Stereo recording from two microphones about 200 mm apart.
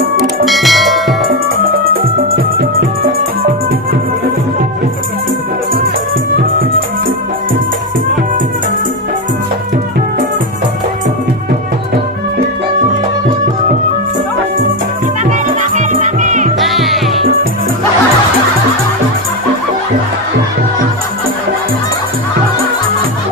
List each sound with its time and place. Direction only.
0.2 s bell: centre (ahead or behind)
1.8 s music: 45° right (ahead or behind)
6.3 s music: 45° right (ahead or behind)
15.7 s music: 40° right (ahead or behind)
16.6 s music: centre (ahead or behind)